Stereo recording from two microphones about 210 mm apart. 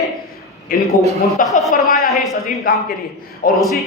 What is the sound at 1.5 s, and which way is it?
Speech, centre (ahead or behind).